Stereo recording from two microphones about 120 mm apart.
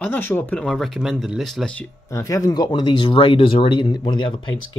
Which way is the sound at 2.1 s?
25° left (ahead or behind).